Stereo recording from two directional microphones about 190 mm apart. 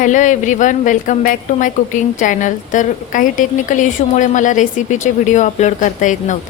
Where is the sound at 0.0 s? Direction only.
40° left (ahead or behind).